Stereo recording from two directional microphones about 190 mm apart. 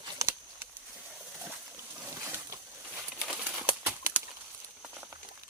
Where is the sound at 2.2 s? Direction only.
15° right (ahead or behind).